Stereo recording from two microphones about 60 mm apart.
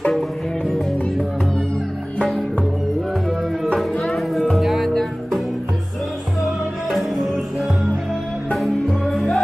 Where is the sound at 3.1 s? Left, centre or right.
Centre.